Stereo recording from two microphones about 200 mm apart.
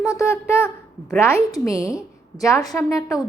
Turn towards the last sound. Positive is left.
turn(degrees=15)  # may be behind; listen again after turning